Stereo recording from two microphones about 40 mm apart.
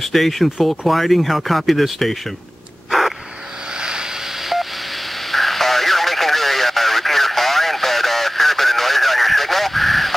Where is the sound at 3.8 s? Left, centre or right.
Centre.